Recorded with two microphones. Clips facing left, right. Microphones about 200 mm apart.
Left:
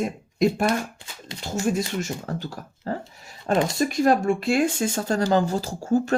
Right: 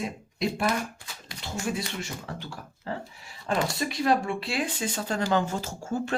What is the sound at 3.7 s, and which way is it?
Speech, 45° left (ahead or behind).